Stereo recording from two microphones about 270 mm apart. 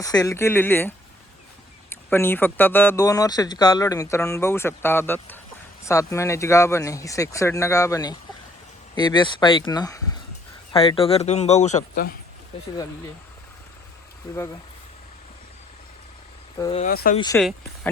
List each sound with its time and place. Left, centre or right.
0.0 s speech: centre; by 12.1 s left
16.6 s speech: centre
16.8 s speech: left
17.2 s speech: centre